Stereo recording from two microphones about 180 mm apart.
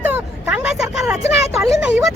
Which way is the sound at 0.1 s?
5° right (ahead or behind).